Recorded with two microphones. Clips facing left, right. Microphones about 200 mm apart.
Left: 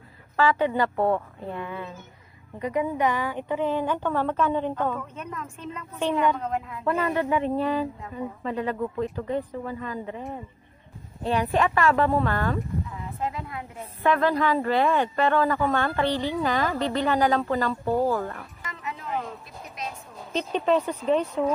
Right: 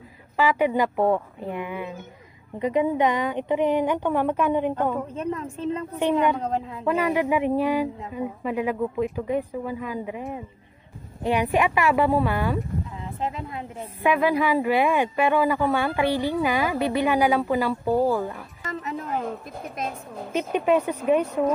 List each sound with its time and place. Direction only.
0.4 s speech: 15° right (ahead or behind)
5.1 s a woman's voice: 30° right (ahead or behind)
6.8 s speech: 15° right (ahead or behind)
11.2 s speech: 15° right (ahead or behind)
13.0 s a woman's voice: 25° right (ahead or behind)
14.0 s speech: 10° right (ahead or behind)
18.7 s music: 40° right (ahead or behind)
19.2 s speech: 55° right (ahead or behind)
20.3 s speech: 10° right (ahead or behind)